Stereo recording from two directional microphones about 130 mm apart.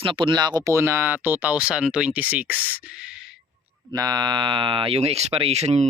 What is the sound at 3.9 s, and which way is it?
Speech, 30° right (ahead or behind).